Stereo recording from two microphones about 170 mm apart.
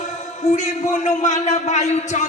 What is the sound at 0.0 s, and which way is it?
A man's voice, 45° left (ahead or behind).